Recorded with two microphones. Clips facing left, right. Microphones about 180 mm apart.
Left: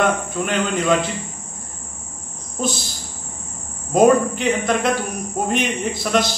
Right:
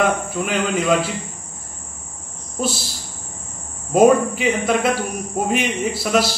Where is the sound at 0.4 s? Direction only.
5° right (ahead or behind).